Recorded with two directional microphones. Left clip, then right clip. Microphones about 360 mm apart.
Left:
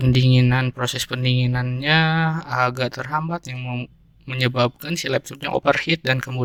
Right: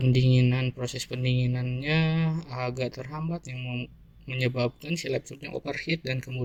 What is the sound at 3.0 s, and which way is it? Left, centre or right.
Speech, left.